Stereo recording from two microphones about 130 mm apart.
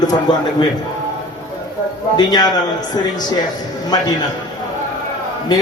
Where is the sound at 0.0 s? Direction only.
30° left (ahead or behind).